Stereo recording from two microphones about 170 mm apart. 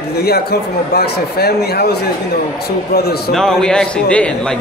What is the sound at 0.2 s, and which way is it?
Speech, 70° left (ahead or behind).